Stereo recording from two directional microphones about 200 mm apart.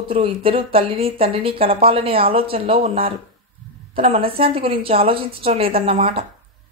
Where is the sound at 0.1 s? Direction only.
25° right (ahead or behind).